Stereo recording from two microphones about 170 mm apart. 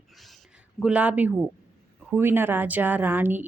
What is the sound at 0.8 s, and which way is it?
Speech, 10° right (ahead or behind).